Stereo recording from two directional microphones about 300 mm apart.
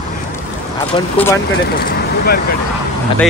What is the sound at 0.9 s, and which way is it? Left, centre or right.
Speech, centre.